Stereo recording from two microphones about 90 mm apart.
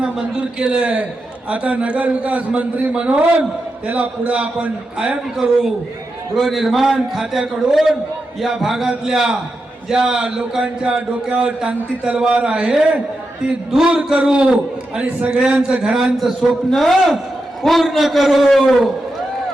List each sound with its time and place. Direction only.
0.0 s a man's voice: 10° right (ahead or behind)